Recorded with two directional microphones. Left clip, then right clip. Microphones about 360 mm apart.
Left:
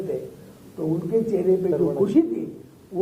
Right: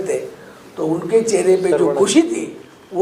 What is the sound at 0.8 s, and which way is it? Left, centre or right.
A man's voice, centre.